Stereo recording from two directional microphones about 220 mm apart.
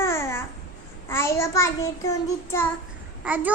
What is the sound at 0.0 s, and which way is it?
Babbling, 10° left (ahead or behind).